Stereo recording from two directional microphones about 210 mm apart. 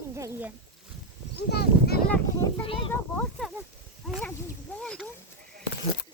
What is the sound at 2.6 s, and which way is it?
Speech, 25° left (ahead or behind).